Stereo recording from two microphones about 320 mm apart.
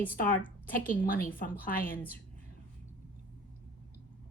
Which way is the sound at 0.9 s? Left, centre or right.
Left.